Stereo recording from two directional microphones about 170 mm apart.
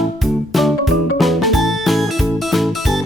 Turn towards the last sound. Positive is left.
turn(degrees=0)  # may be behind; listen again after turning